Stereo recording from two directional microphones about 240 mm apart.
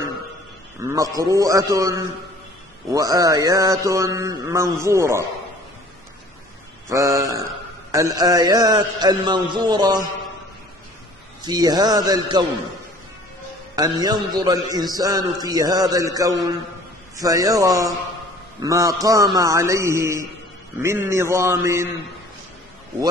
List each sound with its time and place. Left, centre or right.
0.8 s a man's voice: centre
6.9 s a man's voice: centre
11.4 s a man's voice: centre
13.7 s a man's voice: centre